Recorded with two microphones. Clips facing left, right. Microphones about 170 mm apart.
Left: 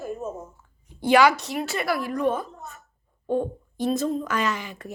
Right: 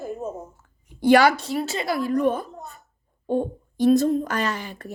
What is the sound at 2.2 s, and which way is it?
Speech, 40° right (ahead or behind).